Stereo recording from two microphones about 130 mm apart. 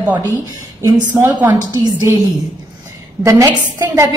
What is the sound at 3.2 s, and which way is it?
Speech, 25° right (ahead or behind).